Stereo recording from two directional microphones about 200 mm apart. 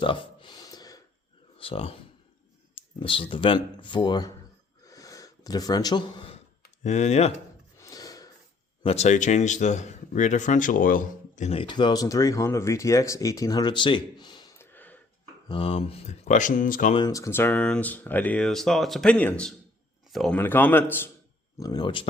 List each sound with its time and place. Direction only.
0.0 s a sound: 25° left (ahead or behind)
1.5 s speech: 30° left (ahead or behind)
3.0 s a man's voice: 25° left (ahead or behind)
4.9 s gasp: 15° left (ahead or behind)
6.6 s speech: 35° left (ahead or behind)
7.8 s a sound: 20° left (ahead or behind)
8.8 s a man's voice: 30° left (ahead or behind); by 15.0 s 10° left (ahead or behind)
15.4 s speech: 25° left (ahead or behind); by 16.9 s 40° left (ahead or behind)
16.9 s speech: 20° left (ahead or behind)
21.6 s a man's voice: 20° left (ahead or behind)